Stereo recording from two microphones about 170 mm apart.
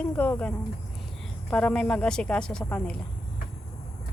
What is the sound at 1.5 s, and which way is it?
A woman's voice, 5° left (ahead or behind).